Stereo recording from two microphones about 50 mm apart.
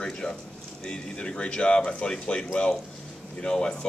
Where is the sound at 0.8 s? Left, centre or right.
Centre.